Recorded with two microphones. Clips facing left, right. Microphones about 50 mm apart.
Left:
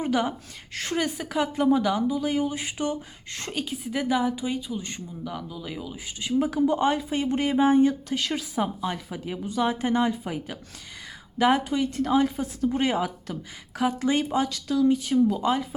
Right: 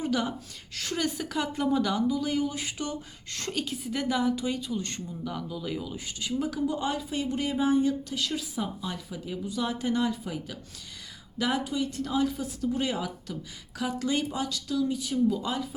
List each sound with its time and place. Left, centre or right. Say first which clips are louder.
0.0 s a woman's voice: left 4 dB; left
1.0 s speech: left 3 dB; centre
6.1 s a woman's voice: left 6 dB; left
6.7 s a woman's voice: left 6 dB; left